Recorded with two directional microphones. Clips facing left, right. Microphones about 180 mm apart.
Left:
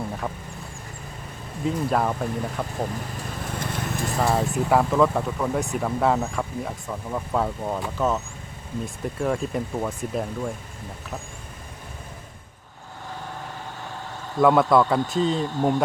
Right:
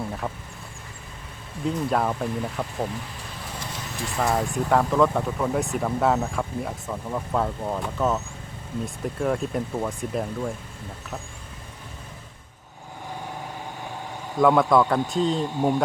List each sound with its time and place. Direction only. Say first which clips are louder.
1.6 s speech: left 1 dB; centre (ahead or behind)
3.6 s vehicle: left 5 dB; 55° left (ahead or behind)
4.2 s speech: left 1 dB; 5° left (ahead or behind)
14.3 s speech: left 1 dB; 5° left (ahead or behind)
15.4 s speech: even; 10° right (ahead or behind)